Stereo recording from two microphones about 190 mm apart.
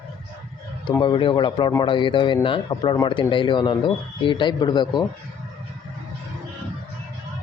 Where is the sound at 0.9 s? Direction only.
25° left (ahead or behind).